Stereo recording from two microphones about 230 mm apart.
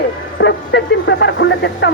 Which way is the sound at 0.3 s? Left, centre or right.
Left.